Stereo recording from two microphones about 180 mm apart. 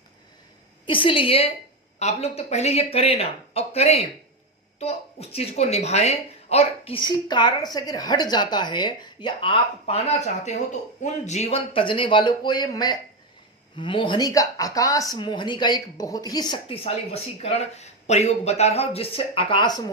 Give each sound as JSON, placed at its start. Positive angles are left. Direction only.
{"t": 0.9, "sound": "speech", "side_deg": 30}